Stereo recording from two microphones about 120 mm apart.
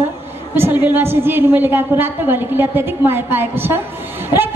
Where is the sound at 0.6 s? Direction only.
20° right (ahead or behind).